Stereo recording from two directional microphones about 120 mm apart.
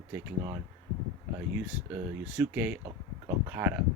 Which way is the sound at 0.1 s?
20° right (ahead or behind).